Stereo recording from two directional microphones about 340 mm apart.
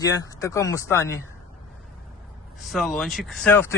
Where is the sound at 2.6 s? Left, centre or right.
Centre.